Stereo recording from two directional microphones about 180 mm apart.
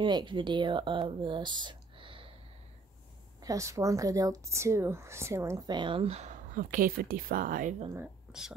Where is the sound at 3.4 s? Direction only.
20° right (ahead or behind); by 7.8 s 45° right (ahead or behind).